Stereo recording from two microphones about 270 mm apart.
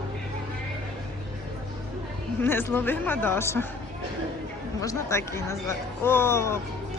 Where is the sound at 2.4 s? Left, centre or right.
Centre.